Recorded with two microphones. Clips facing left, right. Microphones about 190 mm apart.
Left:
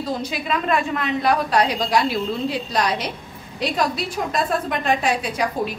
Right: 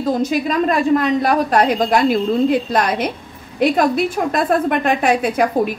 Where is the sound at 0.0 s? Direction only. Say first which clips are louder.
Right 8 dB; 45° right (ahead or behind).